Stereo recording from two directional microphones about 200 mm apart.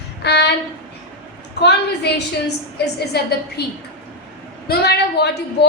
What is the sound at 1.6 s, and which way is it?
A woman's voice, 55° left (ahead or behind).